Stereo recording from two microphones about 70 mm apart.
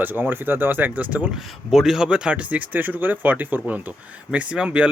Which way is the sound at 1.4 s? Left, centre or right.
Centre.